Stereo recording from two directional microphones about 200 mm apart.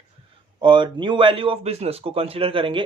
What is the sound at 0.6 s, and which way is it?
A man's voice, 25° right (ahead or behind).